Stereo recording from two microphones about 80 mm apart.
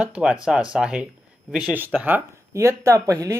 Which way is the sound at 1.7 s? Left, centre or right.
Right.